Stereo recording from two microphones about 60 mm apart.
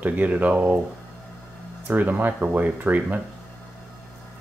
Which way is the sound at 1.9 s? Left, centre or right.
Right.